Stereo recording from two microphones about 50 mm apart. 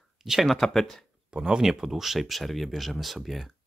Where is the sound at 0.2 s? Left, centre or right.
Centre.